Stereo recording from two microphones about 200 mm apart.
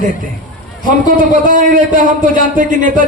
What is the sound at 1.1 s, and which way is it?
Speech, 40° right (ahead or behind).